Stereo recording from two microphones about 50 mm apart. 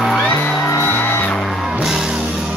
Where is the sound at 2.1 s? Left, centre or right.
Right.